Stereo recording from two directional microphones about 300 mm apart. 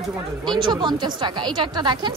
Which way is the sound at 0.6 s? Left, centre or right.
Centre.